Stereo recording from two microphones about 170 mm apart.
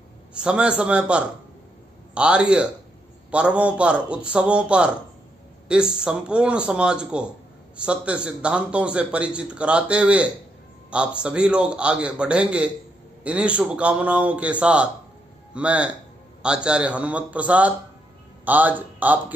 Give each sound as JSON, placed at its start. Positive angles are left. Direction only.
{"t": 0.3, "sound": "a man's voice", "side_deg": -5}